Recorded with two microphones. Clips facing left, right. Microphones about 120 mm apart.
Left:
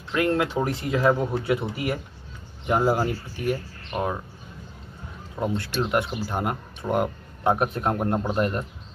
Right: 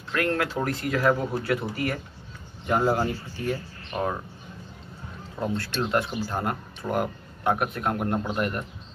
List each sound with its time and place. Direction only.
0.1 s speech: 15° left (ahead or behind)
5.3 s speech: 15° left (ahead or behind)